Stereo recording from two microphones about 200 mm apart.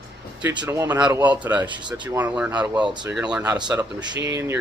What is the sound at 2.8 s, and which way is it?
A man's voice, 20° right (ahead or behind).